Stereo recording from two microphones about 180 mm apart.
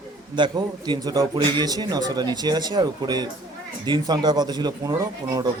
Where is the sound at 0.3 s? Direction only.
25° right (ahead or behind).